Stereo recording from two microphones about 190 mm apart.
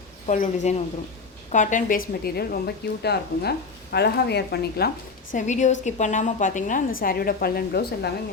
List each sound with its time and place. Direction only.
0.3 s a woman's voice: 40° left (ahead or behind)
2.2 s speech: 55° left (ahead or behind)
5.3 s a woman's voice: 40° left (ahead or behind)